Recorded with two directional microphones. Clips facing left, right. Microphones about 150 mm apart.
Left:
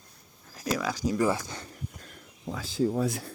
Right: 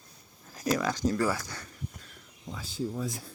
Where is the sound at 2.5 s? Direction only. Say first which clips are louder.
Left 7 dB; 80° left.